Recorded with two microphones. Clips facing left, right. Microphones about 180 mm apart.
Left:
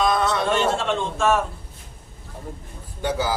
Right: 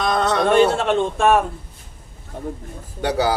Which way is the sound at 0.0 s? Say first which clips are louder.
Right 2 dB; 65° right (ahead or behind).